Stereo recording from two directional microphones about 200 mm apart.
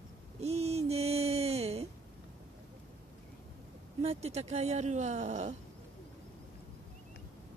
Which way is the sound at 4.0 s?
30° right (ahead or behind).